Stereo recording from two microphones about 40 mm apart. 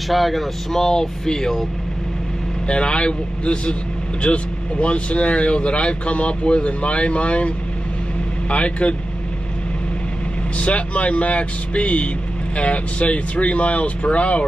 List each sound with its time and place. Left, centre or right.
0.1 s speech: centre
0.7 s speech: centre
2.7 s speech: left
10.6 s speech: left